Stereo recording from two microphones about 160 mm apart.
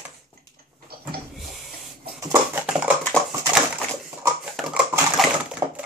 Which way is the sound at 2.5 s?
5° right (ahead or behind).